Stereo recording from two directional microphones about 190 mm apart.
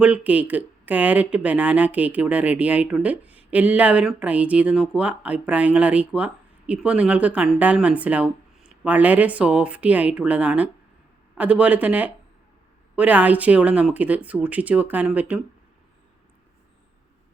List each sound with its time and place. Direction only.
0.0 s speech: 5° right (ahead or behind)